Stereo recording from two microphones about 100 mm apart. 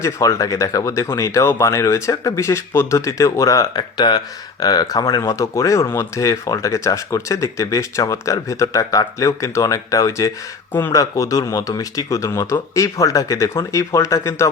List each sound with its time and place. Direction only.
0.0 s speech: 35° left (ahead or behind)
3.8 s speech: 45° left (ahead or behind)
10.7 s speech: 20° left (ahead or behind)
10.9 s speech: 35° left (ahead or behind)